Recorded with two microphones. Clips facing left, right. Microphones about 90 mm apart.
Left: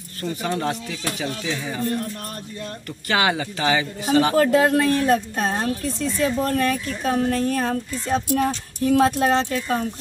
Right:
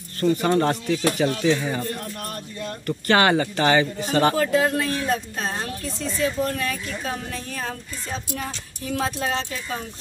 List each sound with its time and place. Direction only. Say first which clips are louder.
0.2 s speech: right 6 dB; 5° left (ahead or behind)
3.1 s speech: right 3 dB; 5° left (ahead or behind)
4.4 s speech: left 4 dB; 50° left (ahead or behind)